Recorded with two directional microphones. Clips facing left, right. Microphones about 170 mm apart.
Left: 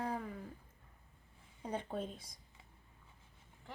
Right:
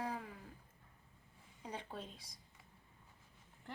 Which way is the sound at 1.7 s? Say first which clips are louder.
Left 7 dB; 50° left (ahead or behind).